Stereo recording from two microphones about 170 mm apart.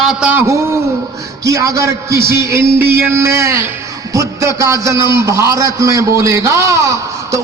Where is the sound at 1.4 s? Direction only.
20° right (ahead or behind).